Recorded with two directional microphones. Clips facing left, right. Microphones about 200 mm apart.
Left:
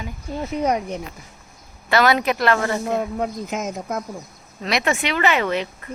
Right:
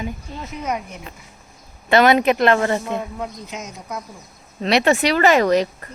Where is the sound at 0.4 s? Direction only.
35° left (ahead or behind).